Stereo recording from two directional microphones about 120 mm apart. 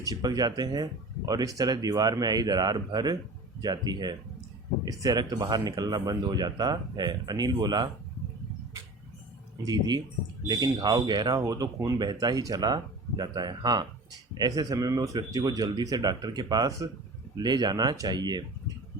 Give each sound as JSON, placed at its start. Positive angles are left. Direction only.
{"t": 0.0, "sound": "speech", "side_deg": -30}
{"t": 9.6, "sound": "speech", "side_deg": -35}